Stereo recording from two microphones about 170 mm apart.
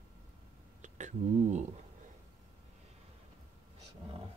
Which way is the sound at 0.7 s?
45° right (ahead or behind).